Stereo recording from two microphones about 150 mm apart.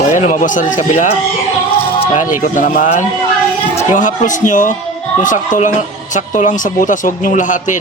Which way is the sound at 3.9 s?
55° left (ahead or behind).